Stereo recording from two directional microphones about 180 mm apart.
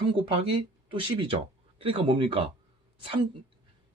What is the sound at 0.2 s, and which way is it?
Speech, 30° right (ahead or behind).